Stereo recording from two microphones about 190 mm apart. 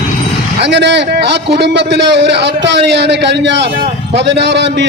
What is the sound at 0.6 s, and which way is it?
A man's voice, 65° right (ahead or behind).